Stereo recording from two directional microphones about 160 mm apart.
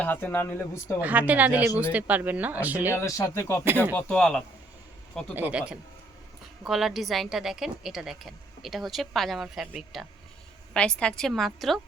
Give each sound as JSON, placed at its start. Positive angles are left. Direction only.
{"t": 0.0, "sound": "speech", "side_deg": 10}
{"t": 1.0, "sound": "speech", "side_deg": -10}
{"t": 2.9, "sound": "a woman's voice", "side_deg": 20}
{"t": 5.3, "sound": "a woman's voice", "side_deg": -10}